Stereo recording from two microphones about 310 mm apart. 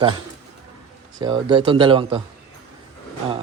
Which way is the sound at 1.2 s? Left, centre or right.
Centre.